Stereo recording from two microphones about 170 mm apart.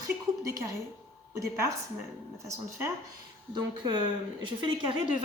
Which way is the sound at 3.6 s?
25° right (ahead or behind).